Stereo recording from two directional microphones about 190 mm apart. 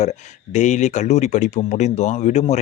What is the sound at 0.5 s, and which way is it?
Speech, 35° left (ahead or behind).